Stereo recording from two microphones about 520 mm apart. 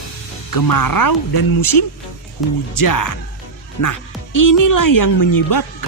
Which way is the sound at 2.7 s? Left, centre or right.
Left.